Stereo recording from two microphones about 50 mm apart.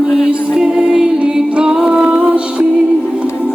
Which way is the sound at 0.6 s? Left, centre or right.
Centre.